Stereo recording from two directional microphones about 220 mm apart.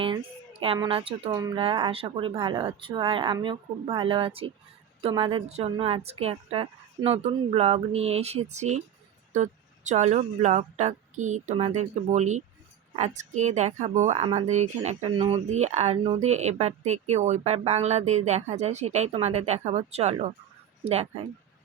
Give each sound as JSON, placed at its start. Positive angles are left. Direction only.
{"t": 0.0, "sound": "speech", "side_deg": -25}